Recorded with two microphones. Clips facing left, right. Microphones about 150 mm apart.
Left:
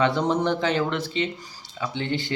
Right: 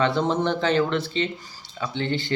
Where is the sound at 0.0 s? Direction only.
15° left (ahead or behind).